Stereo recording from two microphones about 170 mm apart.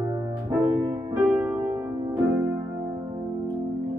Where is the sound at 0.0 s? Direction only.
25° right (ahead or behind).